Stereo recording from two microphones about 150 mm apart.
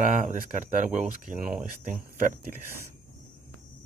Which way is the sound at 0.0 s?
55° right (ahead or behind).